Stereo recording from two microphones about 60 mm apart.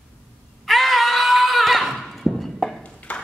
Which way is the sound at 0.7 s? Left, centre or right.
Centre.